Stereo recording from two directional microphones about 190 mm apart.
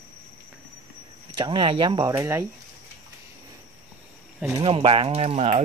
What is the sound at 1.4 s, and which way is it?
Speech, 25° right (ahead or behind).